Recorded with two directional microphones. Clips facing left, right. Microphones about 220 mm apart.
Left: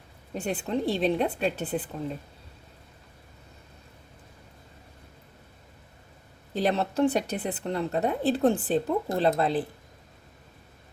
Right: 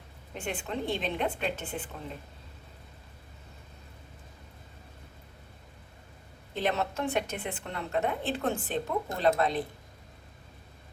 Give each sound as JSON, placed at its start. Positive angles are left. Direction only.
{"t": 0.3, "sound": "a woman's voice", "side_deg": 35}
{"t": 6.5, "sound": "a woman's voice", "side_deg": 35}